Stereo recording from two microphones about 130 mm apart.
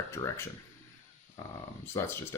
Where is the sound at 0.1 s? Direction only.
20° left (ahead or behind).